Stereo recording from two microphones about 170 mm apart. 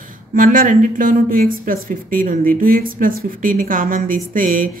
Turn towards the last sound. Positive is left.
turn(degrees=-55)  # may be behind; listen again after turning